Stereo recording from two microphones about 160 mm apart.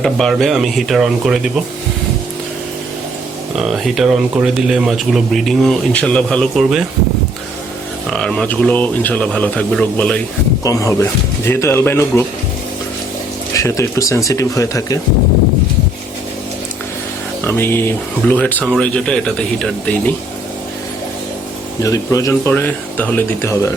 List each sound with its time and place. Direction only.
0.0 s speech: centre (ahead or behind)
3.6 s speech: centre (ahead or behind)
8.1 s speech: 5° left (ahead or behind)
10.6 s speech: 20° left (ahead or behind)
13.5 s speech: 20° left (ahead or behind)
17.4 s speech: 15° left (ahead or behind)
21.8 s speech: 20° left (ahead or behind)